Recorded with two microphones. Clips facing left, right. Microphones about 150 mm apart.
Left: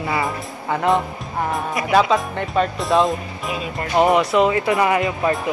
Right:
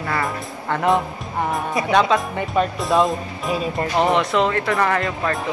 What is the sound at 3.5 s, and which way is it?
Speech, 40° right (ahead or behind).